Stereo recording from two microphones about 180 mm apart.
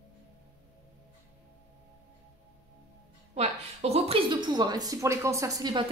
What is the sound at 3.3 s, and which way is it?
A woman's voice, 35° right (ahead or behind).